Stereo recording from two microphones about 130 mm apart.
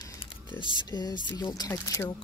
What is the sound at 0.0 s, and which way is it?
Typing, 35° left (ahead or behind).